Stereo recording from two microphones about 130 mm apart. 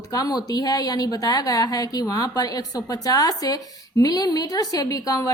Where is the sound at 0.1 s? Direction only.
30° left (ahead or behind).